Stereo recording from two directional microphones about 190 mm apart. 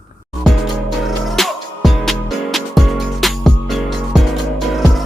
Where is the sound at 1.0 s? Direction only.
Centre (ahead or behind).